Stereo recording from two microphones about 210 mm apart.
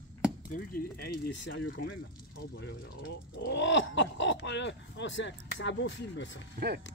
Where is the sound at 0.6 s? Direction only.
50° left (ahead or behind).